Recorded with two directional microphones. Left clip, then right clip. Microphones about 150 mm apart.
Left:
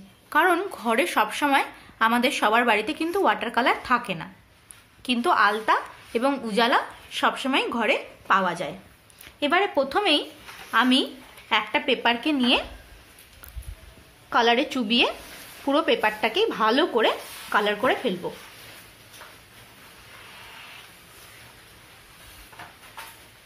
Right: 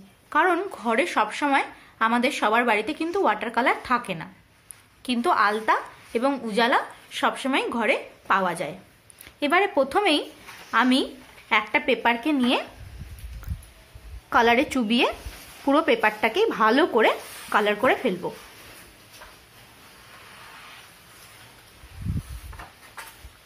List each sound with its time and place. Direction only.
0.3 s a woman's voice: 10° right (ahead or behind)
14.3 s speech: 20° right (ahead or behind)